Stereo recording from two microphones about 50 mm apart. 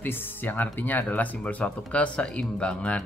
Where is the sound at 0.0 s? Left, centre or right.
Left.